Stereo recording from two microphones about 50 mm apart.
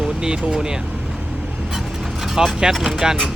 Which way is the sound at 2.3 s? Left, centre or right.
Centre.